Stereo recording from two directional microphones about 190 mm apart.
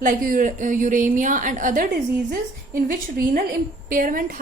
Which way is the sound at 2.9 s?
50° right (ahead or behind).